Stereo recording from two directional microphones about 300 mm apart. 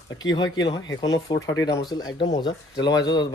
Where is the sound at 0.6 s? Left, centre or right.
Centre.